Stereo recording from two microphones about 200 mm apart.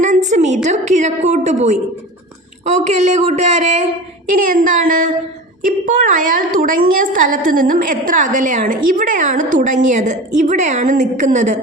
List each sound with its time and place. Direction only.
0.0 s a woman's voice: 35° right (ahead or behind)